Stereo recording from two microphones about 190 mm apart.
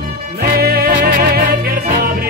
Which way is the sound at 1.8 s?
40° right (ahead or behind).